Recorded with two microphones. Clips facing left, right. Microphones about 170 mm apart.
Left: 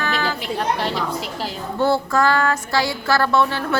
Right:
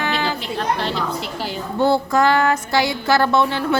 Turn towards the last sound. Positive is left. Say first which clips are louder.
# right 1 dB
turn(degrees=-20)  # may be behind; listen again after turning